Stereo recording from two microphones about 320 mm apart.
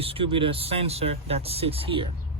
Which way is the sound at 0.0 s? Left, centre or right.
Centre.